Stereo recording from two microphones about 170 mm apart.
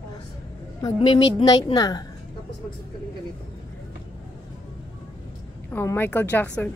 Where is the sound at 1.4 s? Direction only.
35° left (ahead or behind).